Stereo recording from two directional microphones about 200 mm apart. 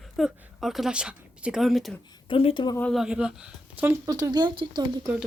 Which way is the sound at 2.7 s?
5° left (ahead or behind).